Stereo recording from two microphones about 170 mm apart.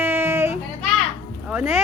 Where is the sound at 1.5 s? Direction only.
5° right (ahead or behind).